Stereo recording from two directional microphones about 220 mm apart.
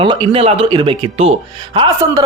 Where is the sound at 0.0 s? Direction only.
20° right (ahead or behind).